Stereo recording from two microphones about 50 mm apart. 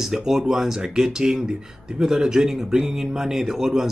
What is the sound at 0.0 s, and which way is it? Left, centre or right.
Speech, centre.